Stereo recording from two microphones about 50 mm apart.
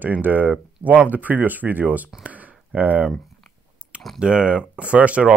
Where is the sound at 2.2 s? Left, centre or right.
Right.